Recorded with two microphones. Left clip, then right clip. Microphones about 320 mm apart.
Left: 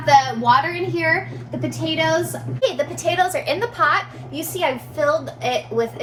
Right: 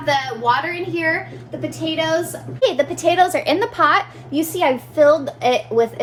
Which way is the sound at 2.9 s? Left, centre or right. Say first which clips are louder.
Right 4 dB; right.